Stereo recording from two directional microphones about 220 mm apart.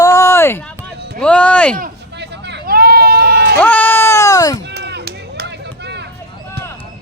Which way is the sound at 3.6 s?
10° left (ahead or behind).